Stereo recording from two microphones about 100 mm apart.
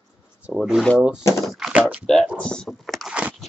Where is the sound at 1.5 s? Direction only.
5° right (ahead or behind).